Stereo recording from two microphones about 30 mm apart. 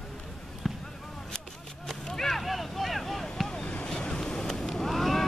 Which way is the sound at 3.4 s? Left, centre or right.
Left.